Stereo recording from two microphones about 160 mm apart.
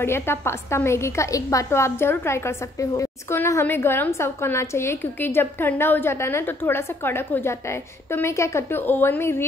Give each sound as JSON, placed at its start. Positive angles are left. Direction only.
{"t": 0.0, "sound": "a woman's voice", "side_deg": 15}